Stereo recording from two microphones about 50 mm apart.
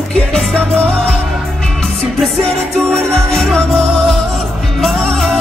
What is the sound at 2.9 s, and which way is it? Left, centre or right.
Music, centre.